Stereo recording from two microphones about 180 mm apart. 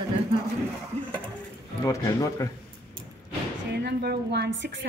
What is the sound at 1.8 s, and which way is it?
Speech, 20° left (ahead or behind).